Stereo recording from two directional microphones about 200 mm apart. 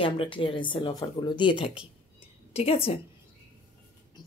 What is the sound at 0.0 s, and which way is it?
Speech, 25° left (ahead or behind).